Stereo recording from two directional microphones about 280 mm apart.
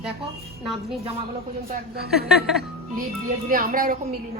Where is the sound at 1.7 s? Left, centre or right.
Right.